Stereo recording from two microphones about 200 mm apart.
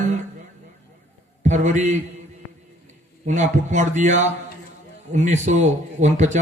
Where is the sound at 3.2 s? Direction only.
35° right (ahead or behind).